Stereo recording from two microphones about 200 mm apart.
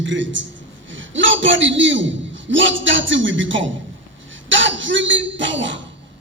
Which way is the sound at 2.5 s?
70° right (ahead or behind).